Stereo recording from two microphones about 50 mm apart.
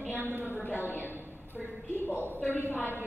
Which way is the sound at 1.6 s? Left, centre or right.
Centre.